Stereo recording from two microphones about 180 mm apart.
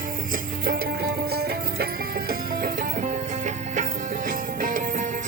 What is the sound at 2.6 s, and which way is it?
Music, 50° right (ahead or behind).